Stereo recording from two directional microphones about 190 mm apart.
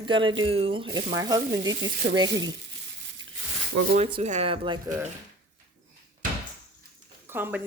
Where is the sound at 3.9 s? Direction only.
35° right (ahead or behind).